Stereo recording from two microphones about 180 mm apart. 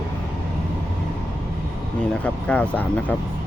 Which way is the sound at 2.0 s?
5° left (ahead or behind).